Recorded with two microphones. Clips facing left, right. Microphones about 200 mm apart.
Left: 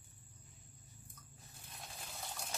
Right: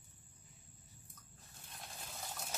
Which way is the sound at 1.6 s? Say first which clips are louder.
Even; centre (ahead or behind).